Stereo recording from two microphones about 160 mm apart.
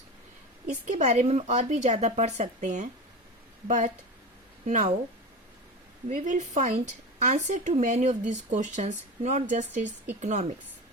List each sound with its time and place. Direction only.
0.7 s speech: 50° right (ahead or behind)
6.1 s speech: 50° right (ahead or behind)